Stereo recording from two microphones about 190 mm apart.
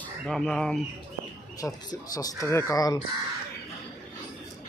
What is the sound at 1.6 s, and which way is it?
Speech, 20° left (ahead or behind).